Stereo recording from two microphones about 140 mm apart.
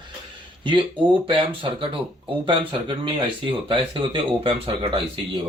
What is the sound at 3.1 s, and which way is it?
Speech, 35° right (ahead or behind).